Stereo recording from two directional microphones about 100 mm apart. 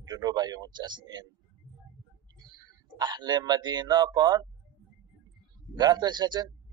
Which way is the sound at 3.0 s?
45° right (ahead or behind).